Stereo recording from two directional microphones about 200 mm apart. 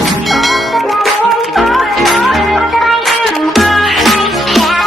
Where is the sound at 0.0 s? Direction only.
Centre (ahead or behind).